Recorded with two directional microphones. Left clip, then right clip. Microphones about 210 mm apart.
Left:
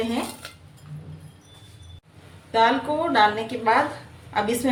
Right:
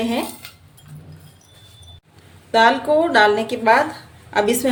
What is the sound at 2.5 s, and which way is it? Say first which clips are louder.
A woman's voice: right 5 dB; 55° right (ahead or behind).